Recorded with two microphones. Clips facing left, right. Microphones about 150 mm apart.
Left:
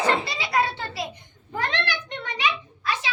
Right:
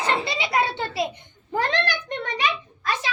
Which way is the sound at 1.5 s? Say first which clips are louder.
Right 4 dB; 35° right (ahead or behind).